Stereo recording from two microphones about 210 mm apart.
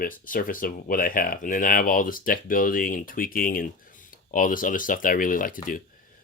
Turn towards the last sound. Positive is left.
turn(degrees=40)  # may be behind; listen again after turning